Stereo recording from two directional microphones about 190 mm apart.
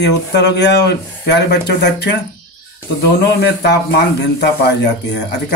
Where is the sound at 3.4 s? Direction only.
60° left (ahead or behind).